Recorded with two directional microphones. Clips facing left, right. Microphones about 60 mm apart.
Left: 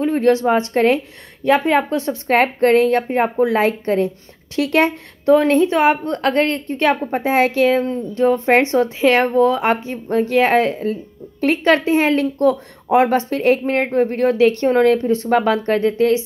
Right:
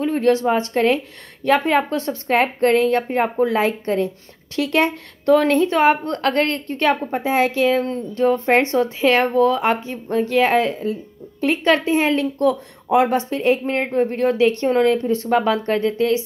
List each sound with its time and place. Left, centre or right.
0.0 s a woman's voice: left
1.4 s a woman's voice: centre
2.2 s speech: left
3.1 s speech: centre
3.4 s a woman's voice: left
5.2 s a woman's voice: centre; by 7.8 s left
7.8 s a woman's voice: centre
13.1 s a woman's voice: left